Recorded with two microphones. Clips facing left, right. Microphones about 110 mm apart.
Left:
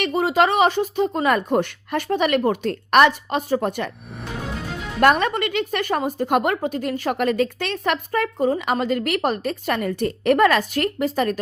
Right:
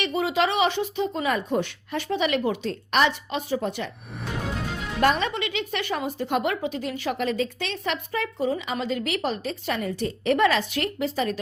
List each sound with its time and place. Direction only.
0.0 s speech: 45° left (ahead or behind)
4.9 s speech: 55° left (ahead or behind)